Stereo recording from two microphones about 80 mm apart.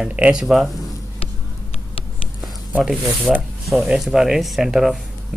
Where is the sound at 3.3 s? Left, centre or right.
Centre.